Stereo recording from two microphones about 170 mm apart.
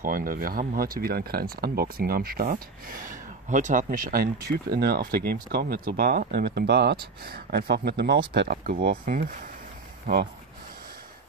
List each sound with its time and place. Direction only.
0.0 s speech: 55° right (ahead or behind); by 8.2 s 75° right (ahead or behind)
8.3 s speech: 55° right (ahead or behind)